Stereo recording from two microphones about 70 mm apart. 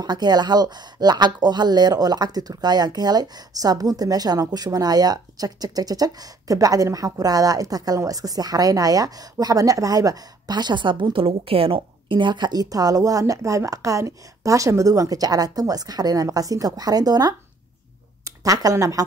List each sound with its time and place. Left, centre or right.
0.0 s speech: right
12.3 s speech: right
18.2 s speech: right